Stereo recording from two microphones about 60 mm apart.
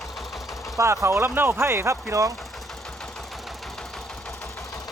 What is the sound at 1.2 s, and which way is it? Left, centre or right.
Speech, right.